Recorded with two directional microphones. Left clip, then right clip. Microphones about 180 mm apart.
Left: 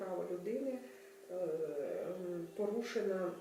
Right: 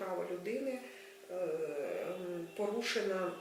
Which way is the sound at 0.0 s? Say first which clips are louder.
Right 2 dB; 15° left (ahead or behind).